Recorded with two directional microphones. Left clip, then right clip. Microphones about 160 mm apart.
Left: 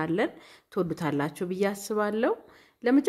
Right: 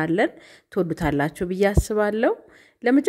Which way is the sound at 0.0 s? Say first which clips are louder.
Right 6 dB; 25° right (ahead or behind).